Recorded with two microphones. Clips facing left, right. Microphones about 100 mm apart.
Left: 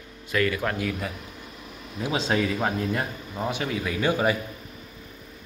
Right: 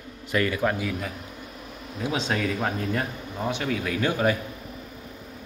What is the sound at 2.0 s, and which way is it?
Speech, 5° left (ahead or behind).